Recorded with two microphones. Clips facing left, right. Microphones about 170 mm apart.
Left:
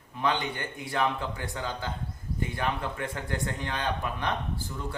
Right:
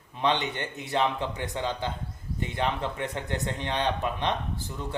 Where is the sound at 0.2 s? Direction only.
25° right (ahead or behind).